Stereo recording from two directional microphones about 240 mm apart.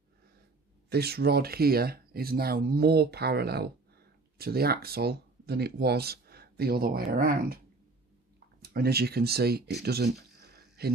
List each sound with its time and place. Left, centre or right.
0.8 s speech: right
8.6 s speech: right
9.8 s a sound: right